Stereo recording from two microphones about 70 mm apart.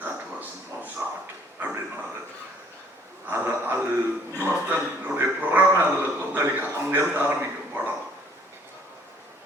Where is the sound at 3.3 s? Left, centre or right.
Right.